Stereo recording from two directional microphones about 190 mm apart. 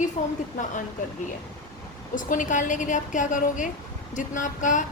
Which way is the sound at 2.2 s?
40° left (ahead or behind).